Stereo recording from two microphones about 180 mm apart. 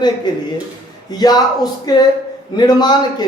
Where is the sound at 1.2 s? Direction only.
20° left (ahead or behind).